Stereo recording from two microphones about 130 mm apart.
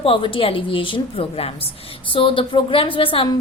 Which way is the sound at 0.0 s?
45° left (ahead or behind).